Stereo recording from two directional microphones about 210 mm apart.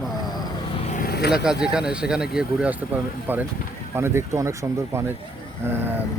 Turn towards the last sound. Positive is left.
turn(degrees=-10)  # may be behind; listen again after turning